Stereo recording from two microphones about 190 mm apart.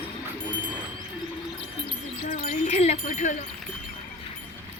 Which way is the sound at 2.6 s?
35° left (ahead or behind).